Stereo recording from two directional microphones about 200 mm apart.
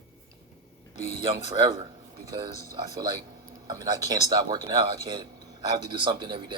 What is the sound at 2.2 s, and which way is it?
Speech, 20° right (ahead or behind).